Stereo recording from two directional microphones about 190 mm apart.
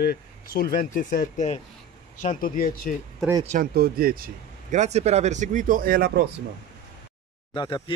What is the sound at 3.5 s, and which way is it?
Speech, 50° right (ahead or behind).